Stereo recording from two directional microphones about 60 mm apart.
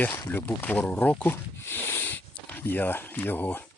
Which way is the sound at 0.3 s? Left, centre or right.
Left.